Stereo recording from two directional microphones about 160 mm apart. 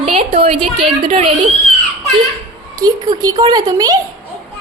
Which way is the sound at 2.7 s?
25° right (ahead or behind).